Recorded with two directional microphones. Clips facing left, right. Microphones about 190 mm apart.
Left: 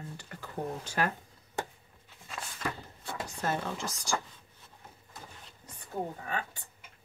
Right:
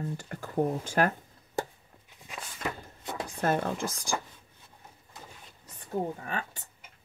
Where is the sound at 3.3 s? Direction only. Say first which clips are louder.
Right 6 dB; 55° right (ahead or behind).